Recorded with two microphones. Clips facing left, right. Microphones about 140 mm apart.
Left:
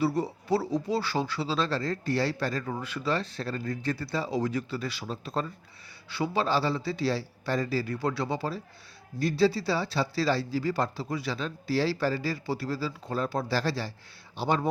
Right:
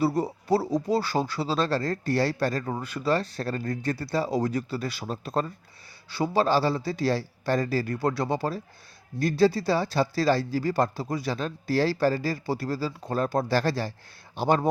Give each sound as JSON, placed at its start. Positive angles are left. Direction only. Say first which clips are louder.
{"t": 0.0, "sound": "speech", "louder": "right 2 dB", "side_deg": -40}